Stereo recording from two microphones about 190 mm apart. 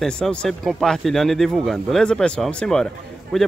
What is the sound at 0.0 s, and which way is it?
Speech, 5° left (ahead or behind).